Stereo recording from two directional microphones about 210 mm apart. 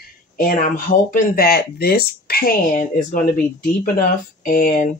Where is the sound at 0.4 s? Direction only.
40° left (ahead or behind).